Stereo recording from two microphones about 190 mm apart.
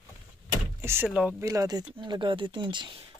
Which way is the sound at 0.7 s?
15° right (ahead or behind).